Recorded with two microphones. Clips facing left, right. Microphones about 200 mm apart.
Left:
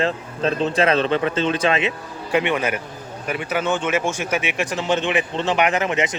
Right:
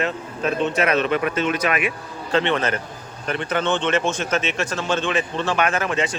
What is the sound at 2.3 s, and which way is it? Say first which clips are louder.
A man's voice: even; 10° left (ahead or behind).